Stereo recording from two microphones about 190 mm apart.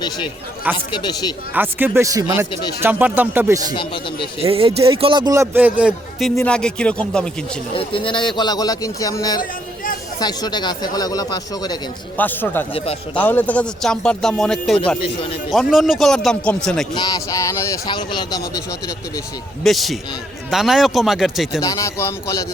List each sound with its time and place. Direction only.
0.9 s speech: 25° left (ahead or behind)
1.5 s a man's voice: 10° right (ahead or behind)
3.8 s speech: 25° left (ahead or behind)
4.4 s a man's voice: 30° right (ahead or behind); by 7.3 s 5° left (ahead or behind)
7.7 s speech: 30° left (ahead or behind)
9.4 s a sound: 45° left (ahead or behind)
10.2 s speech: 20° left (ahead or behind)
12.1 s a man's voice: 10° left (ahead or behind)
12.7 s a man's voice: 30° left (ahead or behind)
13.1 s a man's voice: 10° left (ahead or behind)
16.9 s speech: 20° left (ahead or behind)
19.6 s a man's voice: centre (ahead or behind)
21.6 s a man's voice: 15° left (ahead or behind)